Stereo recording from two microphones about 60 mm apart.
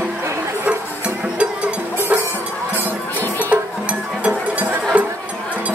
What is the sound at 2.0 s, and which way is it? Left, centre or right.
Music, right.